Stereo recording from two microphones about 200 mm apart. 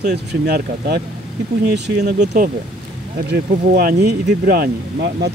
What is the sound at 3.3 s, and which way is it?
Speech, 50° right (ahead or behind).